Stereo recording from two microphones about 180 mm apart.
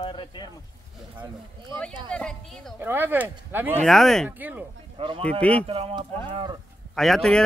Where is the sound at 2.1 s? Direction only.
5° left (ahead or behind).